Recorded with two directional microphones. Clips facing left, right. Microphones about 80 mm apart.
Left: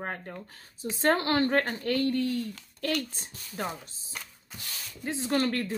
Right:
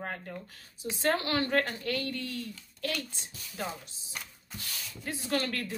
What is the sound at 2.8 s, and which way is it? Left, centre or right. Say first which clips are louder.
Speech: left 5 dB; left.